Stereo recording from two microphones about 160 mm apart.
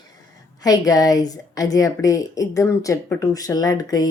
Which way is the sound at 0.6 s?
20° left (ahead or behind).